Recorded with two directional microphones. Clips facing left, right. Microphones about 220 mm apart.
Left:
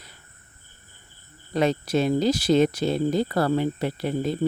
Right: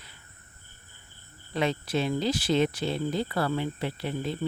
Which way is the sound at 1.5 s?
40° left (ahead or behind).